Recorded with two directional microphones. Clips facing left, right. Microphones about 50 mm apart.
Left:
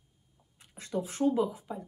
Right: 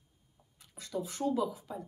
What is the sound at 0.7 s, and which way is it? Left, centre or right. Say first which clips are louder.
Speech: left 4 dB; left.